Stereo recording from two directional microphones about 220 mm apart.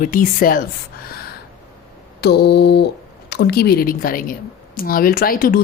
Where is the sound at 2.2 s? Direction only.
50° left (ahead or behind).